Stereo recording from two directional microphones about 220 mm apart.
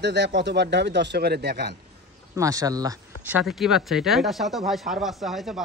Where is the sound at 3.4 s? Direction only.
Centre (ahead or behind).